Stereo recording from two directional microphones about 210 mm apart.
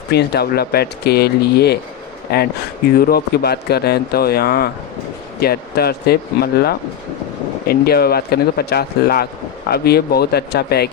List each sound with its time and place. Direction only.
0.1 s speech: 50° left (ahead or behind)